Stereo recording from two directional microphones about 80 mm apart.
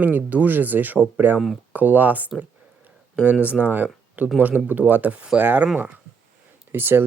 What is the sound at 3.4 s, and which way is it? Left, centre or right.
Speech, centre.